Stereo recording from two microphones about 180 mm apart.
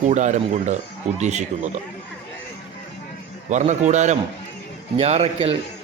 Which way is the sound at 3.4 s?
40° right (ahead or behind).